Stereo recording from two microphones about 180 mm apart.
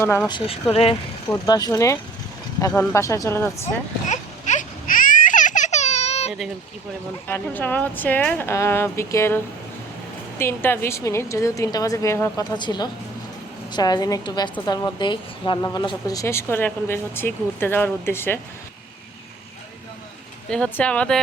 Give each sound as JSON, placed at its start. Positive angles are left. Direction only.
{"t": 0.0, "sound": "a woman's voice", "side_deg": 15}
{"t": 0.3, "sound": "a woman's voice", "side_deg": 30}
{"t": 1.5, "sound": "a woman's voice", "side_deg": 20}
{"t": 4.1, "sound": "baby cry", "side_deg": 45}
{"t": 7.3, "sound": "a woman's voice", "side_deg": 10}
{"t": 20.5, "sound": "a woman's voice", "side_deg": 5}